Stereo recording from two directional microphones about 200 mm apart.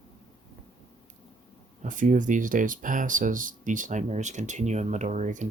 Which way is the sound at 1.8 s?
40° right (ahead or behind).